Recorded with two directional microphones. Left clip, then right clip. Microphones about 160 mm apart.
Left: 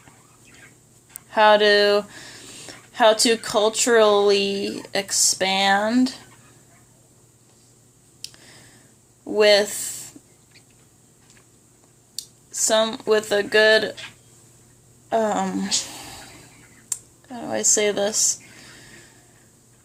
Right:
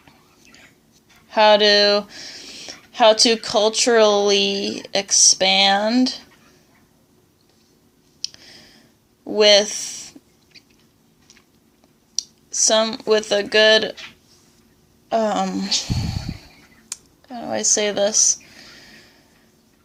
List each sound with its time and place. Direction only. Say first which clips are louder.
1.3 s speech: right 2 dB; 25° right (ahead or behind)
8.3 s clicking: right 3 dB; 25° right (ahead or behind)
9.2 s writing: right 2 dB; 30° right (ahead or behind)
12.1 s speech: right 7 dB; 25° right (ahead or behind)
15.1 s speech: right 2 dB; 25° right (ahead or behind)
16.9 s a sound: right 1 dB; 20° right (ahead or behind)